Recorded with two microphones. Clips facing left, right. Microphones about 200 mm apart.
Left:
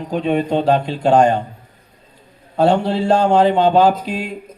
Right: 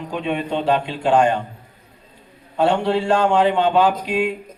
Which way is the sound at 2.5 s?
40° left (ahead or behind).